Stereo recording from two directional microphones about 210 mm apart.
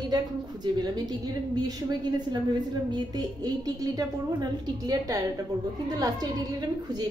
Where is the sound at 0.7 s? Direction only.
20° right (ahead or behind).